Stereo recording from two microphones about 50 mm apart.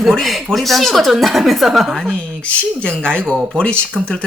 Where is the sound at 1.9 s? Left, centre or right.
Centre.